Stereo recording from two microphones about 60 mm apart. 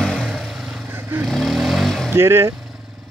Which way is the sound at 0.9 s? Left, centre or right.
Right.